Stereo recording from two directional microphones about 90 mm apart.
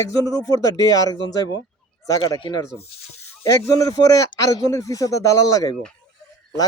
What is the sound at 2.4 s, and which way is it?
Speech, 55° left (ahead or behind).